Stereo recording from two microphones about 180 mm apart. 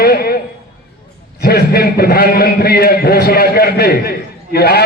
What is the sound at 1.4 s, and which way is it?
A man's voice, 60° left (ahead or behind).